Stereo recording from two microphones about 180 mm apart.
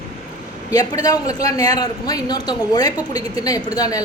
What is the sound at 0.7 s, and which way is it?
A man's voice, 20° left (ahead or behind).